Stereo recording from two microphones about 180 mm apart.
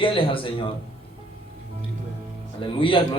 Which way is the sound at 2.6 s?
30° left (ahead or behind).